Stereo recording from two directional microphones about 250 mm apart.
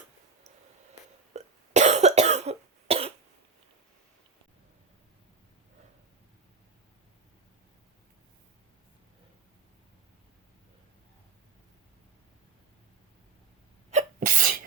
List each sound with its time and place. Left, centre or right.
1.3 s cough: right
13.9 s sneeze: right